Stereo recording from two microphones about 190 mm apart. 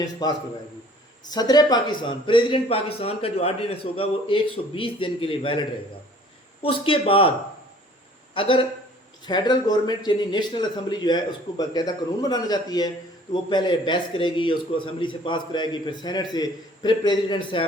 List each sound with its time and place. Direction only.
0.0 s a man's voice: 20° left (ahead or behind)
8.3 s a man's voice: 30° left (ahead or behind)